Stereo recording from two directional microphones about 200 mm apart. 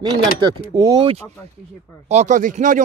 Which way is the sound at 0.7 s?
20° right (ahead or behind).